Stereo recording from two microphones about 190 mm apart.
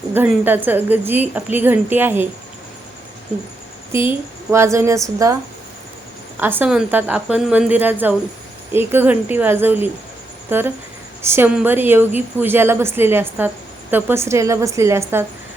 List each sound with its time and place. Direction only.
0.1 s a woman's voice: 10° right (ahead or behind)
4.5 s a woman's voice: 15° right (ahead or behind)
6.4 s a woman's voice: 10° right (ahead or behind)